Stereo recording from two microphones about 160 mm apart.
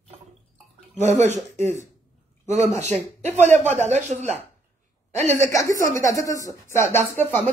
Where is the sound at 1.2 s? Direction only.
45° right (ahead or behind).